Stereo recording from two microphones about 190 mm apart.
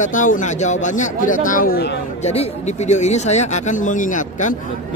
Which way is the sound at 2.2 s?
35° left (ahead or behind).